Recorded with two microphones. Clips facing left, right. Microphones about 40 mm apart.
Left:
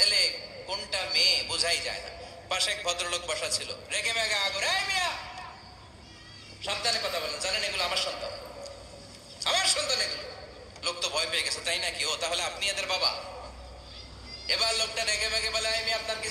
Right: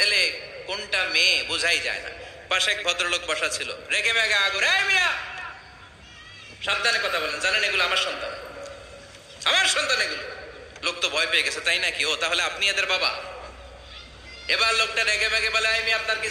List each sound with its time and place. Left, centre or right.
0.0 s a man's voice: right
6.6 s a man's voice: right